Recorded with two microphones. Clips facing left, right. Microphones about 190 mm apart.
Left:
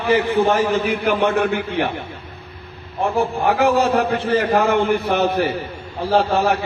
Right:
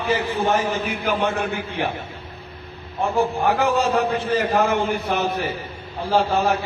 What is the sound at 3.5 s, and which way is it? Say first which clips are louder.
A man's voice: left 6 dB; 60° left (ahead or behind).